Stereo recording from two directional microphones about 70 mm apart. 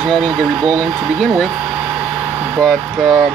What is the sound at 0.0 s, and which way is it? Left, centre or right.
Speech, centre.